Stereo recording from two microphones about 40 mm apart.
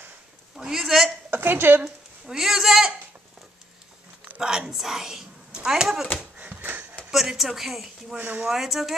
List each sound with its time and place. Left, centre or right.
0.6 s speech: centre
1.3 s speech: right
2.2 s speech: centre
4.4 s speech: centre
6.3 s a sound: right
6.6 s a sound: right
7.1 s a woman's voice: centre
8.2 s speech: right
8.5 s a woman's voice: centre